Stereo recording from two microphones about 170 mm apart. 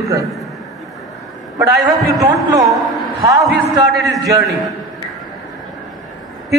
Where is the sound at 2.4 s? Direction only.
20° right (ahead or behind).